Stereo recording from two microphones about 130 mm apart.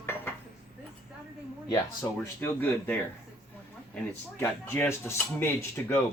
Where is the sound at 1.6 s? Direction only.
30° left (ahead or behind).